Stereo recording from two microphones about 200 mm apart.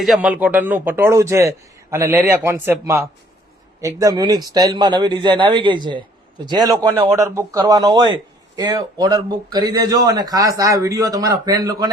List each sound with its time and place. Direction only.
0.0 s a man's voice: 5° right (ahead or behind); by 11.9 s 20° right (ahead or behind)